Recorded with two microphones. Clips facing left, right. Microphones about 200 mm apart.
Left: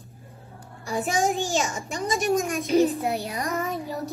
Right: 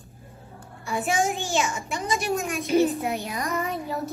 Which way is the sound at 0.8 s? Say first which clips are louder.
Even; 35° left (ahead or behind).